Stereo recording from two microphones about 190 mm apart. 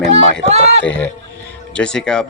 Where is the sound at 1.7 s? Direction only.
5° left (ahead or behind).